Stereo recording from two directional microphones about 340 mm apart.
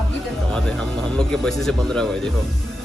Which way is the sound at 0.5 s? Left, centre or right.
Centre.